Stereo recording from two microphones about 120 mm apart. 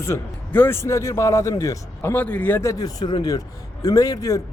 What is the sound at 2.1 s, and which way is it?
Speech, 15° left (ahead or behind).